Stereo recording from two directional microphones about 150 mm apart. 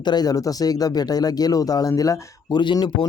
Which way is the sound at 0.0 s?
30° left (ahead or behind).